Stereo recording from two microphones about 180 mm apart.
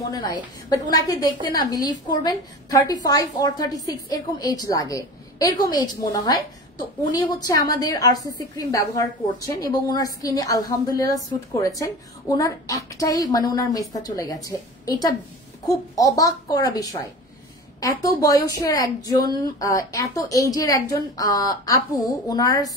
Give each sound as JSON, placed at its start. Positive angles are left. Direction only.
{"t": 0.0, "sound": "a woman's voice", "side_deg": 20}